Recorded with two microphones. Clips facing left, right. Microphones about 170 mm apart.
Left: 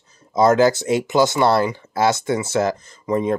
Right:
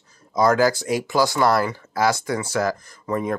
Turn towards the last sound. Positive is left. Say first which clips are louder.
# left 4 dB
turn(degrees=20)  # may be behind; listen again after turning